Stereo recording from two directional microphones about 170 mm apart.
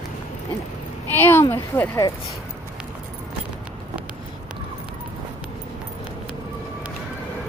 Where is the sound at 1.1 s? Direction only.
10° left (ahead or behind).